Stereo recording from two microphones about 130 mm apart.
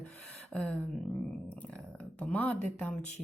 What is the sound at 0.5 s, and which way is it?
Speech, 5° left (ahead or behind).